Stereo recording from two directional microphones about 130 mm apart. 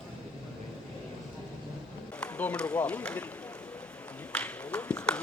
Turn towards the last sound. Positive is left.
turn(degrees=10)  # may be behind; listen again after turning